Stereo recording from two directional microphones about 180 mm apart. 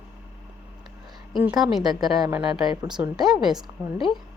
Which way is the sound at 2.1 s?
20° right (ahead or behind).